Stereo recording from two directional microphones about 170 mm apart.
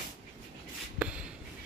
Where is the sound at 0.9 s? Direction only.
10° right (ahead or behind).